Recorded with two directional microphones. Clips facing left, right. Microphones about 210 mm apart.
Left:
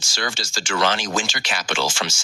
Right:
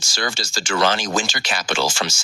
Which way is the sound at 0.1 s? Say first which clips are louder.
Right 2 dB; 40° right (ahead or behind).